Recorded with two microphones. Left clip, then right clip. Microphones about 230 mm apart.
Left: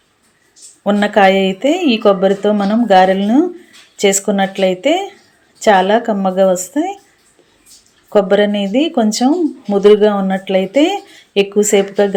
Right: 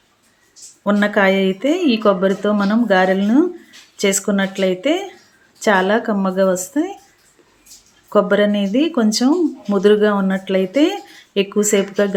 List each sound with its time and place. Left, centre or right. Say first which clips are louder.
0.9 s speech: left 5 dB; centre
8.1 s speech: left 3 dB; centre